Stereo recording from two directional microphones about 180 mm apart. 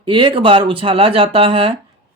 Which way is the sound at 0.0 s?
30° right (ahead or behind).